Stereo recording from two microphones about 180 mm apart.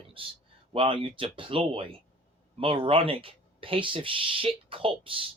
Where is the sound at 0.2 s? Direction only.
30° right (ahead or behind).